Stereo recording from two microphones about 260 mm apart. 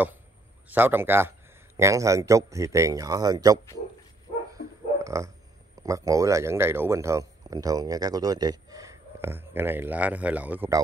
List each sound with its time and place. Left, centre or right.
0.7 s speech: centre
4.6 s a sound: left
5.0 s speech: centre